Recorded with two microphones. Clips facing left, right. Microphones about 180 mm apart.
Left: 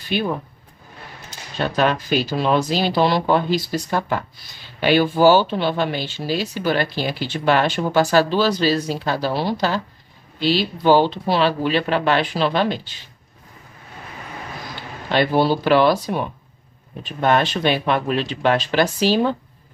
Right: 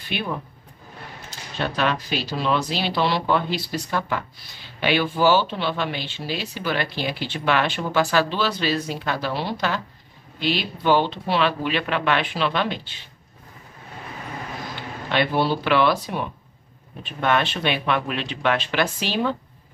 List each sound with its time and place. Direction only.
0.1 s speech: 40° left (ahead or behind)
1.6 s speech: 40° left (ahead or behind)
14.8 s speech: 40° left (ahead or behind)